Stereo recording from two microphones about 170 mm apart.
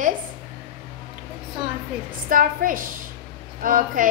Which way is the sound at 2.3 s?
55° right (ahead or behind).